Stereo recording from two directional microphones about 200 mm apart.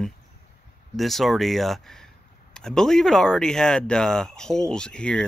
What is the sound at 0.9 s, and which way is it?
Speech, centre (ahead or behind).